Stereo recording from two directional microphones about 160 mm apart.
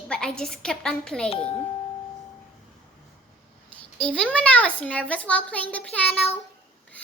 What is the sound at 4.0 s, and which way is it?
A child's voice, 5° left (ahead or behind).